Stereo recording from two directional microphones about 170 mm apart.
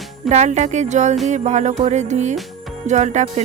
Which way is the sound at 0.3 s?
45° right (ahead or behind).